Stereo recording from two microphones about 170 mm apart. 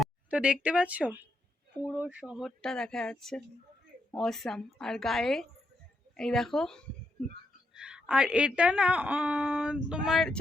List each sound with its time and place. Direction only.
0.0 s a woman's voice: 5° right (ahead or behind)